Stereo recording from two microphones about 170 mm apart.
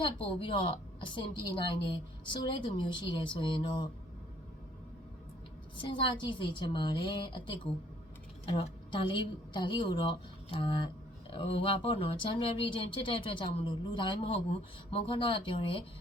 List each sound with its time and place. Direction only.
0.0 s a woman's voice: 30° left (ahead or behind)
5.7 s a woman's voice: 30° left (ahead or behind)